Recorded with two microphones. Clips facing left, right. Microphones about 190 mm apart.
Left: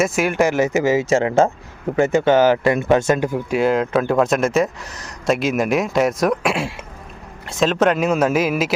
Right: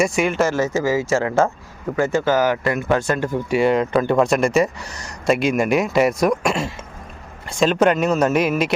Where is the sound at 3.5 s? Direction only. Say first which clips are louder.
Right 1 dB; centre (ahead or behind).